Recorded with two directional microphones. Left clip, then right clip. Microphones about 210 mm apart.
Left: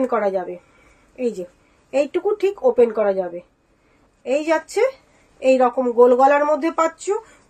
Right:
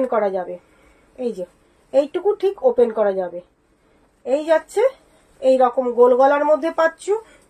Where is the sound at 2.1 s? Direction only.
20° left (ahead or behind).